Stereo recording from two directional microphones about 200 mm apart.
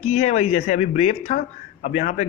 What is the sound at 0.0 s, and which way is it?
Speech, 35° left (ahead or behind).